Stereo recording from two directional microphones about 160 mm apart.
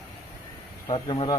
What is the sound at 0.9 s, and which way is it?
Speech, 30° left (ahead or behind).